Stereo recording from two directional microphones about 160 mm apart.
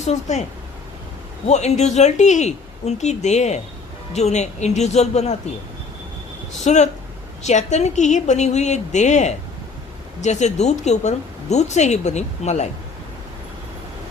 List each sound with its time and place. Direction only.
0.0 s speech: 45° left (ahead or behind)
1.5 s speech: 45° left (ahead or behind)
6.7 s speech: 45° left (ahead or behind)